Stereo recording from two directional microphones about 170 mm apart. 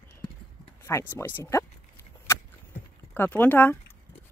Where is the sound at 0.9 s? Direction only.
15° left (ahead or behind).